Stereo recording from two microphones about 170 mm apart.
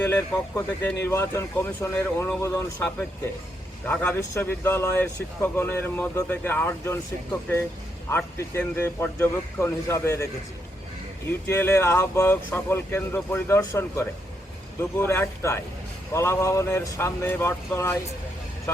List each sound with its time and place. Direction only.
0.0 s speech: 15° left (ahead or behind)
8.1 s speech: 15° left (ahead or behind)
11.3 s speech: 15° left (ahead or behind)